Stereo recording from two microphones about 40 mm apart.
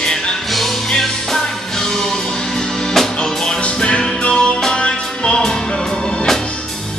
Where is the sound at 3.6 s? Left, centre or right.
Left.